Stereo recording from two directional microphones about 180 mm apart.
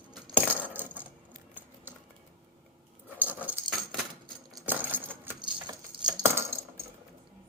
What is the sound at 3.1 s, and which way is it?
Dog, 10° right (ahead or behind).